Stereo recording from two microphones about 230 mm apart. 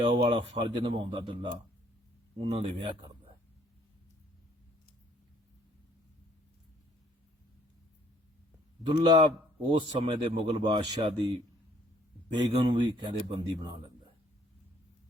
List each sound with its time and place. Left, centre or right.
0.0 s a man's voice: right
8.9 s a man's voice: right
12.3 s a man's voice: centre